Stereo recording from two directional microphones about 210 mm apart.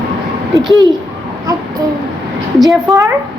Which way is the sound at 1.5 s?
15° right (ahead or behind).